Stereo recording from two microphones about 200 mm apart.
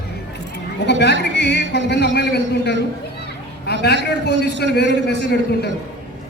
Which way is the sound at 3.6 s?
55° left (ahead or behind).